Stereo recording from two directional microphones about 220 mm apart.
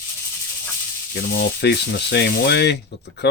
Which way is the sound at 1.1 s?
50° left (ahead or behind).